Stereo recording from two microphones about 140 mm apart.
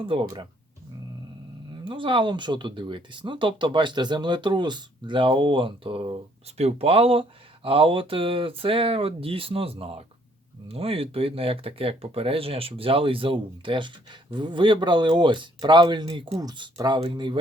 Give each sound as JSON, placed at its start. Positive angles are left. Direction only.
{"t": 0.0, "sound": "speech", "side_deg": -40}
{"t": 1.8, "sound": "speech", "side_deg": -35}